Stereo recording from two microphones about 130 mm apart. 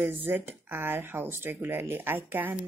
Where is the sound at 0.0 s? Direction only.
15° right (ahead or behind).